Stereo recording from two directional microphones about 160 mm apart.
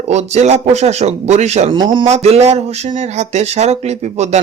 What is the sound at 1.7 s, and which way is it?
Speech, 30° right (ahead or behind).